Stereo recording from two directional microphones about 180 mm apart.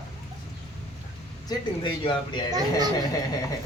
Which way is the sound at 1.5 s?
25° left (ahead or behind).